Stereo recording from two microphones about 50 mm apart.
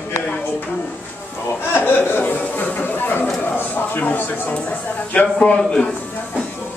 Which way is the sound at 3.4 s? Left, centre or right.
Left.